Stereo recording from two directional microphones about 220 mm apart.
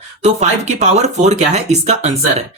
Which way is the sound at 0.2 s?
30° right (ahead or behind).